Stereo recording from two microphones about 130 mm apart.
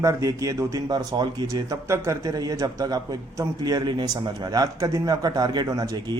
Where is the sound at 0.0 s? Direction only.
25° right (ahead or behind).